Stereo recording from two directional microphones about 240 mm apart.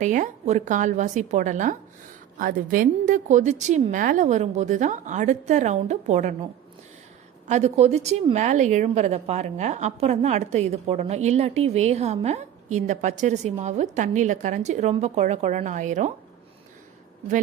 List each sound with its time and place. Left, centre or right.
0.0 s a woman's voice: right